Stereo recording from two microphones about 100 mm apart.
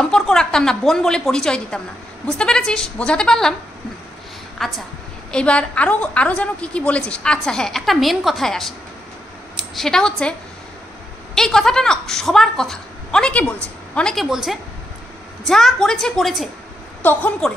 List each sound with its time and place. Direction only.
0.0 s a woman's voice: 5° left (ahead or behind)
4.6 s a woman's voice: centre (ahead or behind)
5.3 s a woman's voice: 10° left (ahead or behind)
9.8 s a woman's voice: 5° left (ahead or behind)
11.3 s a woman's voice: 5° left (ahead or behind)
14.3 s a woman's voice: 5° right (ahead or behind)
17.0 s a woman's voice: 20° left (ahead or behind)